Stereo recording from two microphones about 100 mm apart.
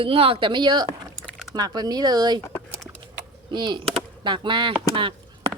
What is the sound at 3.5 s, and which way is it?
Speech, 50° right (ahead or behind).